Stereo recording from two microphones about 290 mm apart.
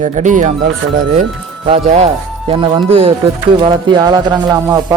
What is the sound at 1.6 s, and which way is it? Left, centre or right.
Speech, right.